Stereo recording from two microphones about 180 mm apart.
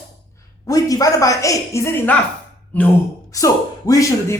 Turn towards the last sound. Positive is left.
turn(degrees=20)  # may be behind; listen again after turning